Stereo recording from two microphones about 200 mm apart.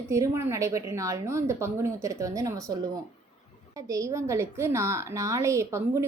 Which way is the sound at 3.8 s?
15° right (ahead or behind).